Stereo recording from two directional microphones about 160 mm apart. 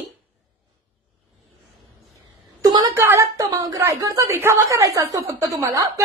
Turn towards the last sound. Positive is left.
turn(degrees=-15)  # may be behind; listen again after turning